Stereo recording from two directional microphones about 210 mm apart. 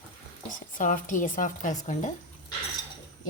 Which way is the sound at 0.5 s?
40° left (ahead or behind).